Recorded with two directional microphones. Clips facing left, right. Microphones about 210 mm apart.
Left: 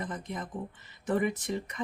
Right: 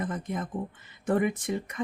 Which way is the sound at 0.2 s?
50° right (ahead or behind).